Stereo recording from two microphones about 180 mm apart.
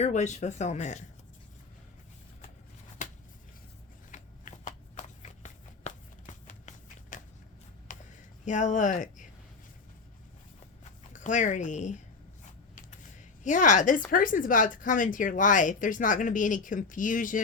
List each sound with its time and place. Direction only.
0.0 s speech: 40° left (ahead or behind)
3.0 s a sound: 45° left (ahead or behind)
4.1 s shuffling cards: 45° left (ahead or behind)
7.9 s a sound: 50° left (ahead or behind)
8.4 s speech: 45° left (ahead or behind)
11.1 s speech: 45° left (ahead or behind)
13.4 s speech: 45° left (ahead or behind)